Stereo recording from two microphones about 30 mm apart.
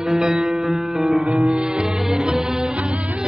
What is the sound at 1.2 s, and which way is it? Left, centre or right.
Music, right.